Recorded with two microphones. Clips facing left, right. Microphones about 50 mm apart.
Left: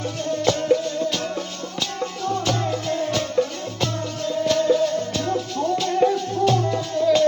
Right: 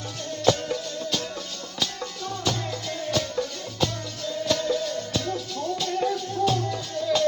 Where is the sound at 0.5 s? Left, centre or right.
Left.